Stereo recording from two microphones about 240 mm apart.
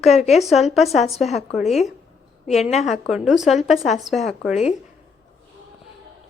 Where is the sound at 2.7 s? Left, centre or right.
Centre.